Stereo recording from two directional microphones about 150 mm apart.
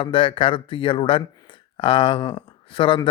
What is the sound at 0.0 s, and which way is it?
Speech, 35° left (ahead or behind).